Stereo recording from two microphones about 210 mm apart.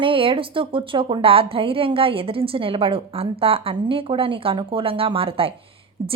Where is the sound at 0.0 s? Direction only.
25° right (ahead or behind).